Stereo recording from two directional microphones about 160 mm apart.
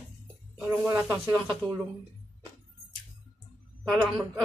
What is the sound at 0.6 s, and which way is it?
Speech, 10° right (ahead or behind).